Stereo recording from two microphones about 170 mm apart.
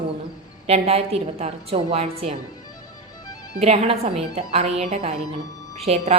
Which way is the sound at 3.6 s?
40° right (ahead or behind).